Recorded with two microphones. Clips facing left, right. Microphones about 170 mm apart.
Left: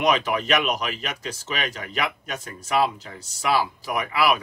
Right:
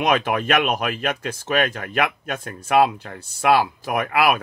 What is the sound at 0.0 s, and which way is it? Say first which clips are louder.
Speech: right 2 dB; 55° right (ahead or behind).